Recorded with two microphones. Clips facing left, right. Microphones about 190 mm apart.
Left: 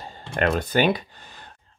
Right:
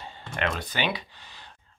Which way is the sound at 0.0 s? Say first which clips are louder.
Left 6 dB; 45° left (ahead or behind).